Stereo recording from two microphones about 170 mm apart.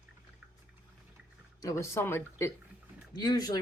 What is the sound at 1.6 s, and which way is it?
Speech, 20° left (ahead or behind).